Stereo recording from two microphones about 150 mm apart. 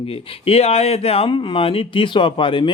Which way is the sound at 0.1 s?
40° left (ahead or behind).